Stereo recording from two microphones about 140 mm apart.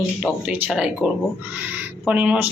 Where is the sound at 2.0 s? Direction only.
10° right (ahead or behind).